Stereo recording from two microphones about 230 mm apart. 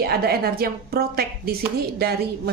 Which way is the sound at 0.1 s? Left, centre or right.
Right.